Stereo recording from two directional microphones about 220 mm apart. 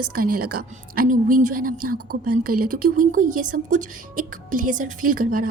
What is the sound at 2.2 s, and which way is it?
Speech, 90° right.